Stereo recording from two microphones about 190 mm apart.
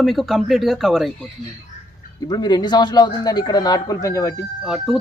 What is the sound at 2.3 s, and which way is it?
A man's voice, 20° left (ahead or behind).